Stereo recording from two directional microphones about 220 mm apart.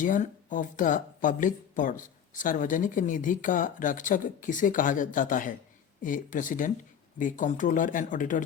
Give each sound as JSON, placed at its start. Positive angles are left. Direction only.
{"t": 0.0, "sound": "speech", "side_deg": 35}